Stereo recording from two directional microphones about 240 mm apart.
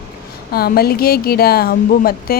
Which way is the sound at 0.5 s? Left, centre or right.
Left.